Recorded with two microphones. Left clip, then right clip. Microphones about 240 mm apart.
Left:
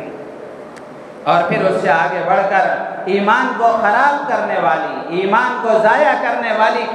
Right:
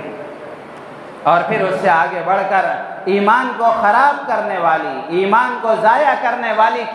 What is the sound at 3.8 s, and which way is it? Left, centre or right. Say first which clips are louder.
Speech: right 1 dB; right.